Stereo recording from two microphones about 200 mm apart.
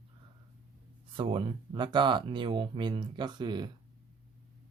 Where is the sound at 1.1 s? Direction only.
25° right (ahead or behind).